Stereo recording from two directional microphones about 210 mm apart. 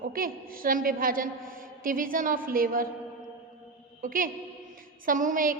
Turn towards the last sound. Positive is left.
turn(degrees=-40)  # may be behind; listen again after turning